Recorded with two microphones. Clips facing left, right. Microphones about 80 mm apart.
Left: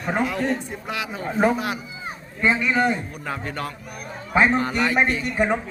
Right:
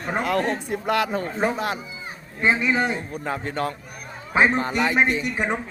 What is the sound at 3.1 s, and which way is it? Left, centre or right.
Speech, right.